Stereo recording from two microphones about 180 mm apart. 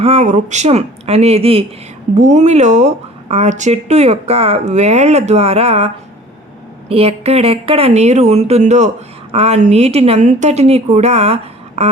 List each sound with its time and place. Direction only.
0.0 s speech: 35° right (ahead or behind)